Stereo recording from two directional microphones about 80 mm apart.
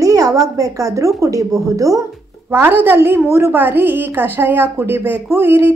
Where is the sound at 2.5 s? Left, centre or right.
Right.